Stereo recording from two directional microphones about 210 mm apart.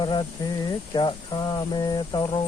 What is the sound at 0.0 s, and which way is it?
Speech, 20° left (ahead or behind).